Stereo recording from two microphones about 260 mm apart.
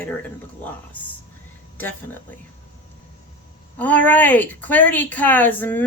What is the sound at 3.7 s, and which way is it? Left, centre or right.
A woman's voice, centre.